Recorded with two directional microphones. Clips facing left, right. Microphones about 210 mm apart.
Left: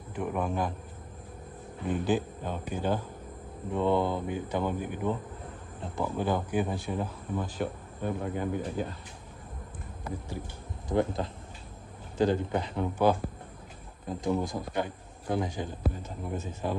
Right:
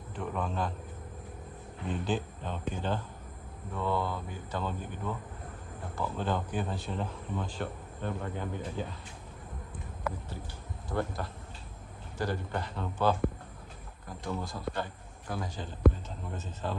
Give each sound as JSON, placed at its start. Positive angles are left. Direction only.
{"t": 0.1, "sound": "speech", "side_deg": 10}
{"t": 1.9, "sound": "speech", "side_deg": 10}
{"t": 3.7, "sound": "speech", "side_deg": 20}
{"t": 10.9, "sound": "a man's voice", "side_deg": 20}